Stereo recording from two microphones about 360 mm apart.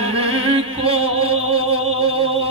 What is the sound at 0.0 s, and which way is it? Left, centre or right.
Music, centre.